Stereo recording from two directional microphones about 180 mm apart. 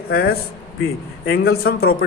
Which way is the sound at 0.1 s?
55° left (ahead or behind).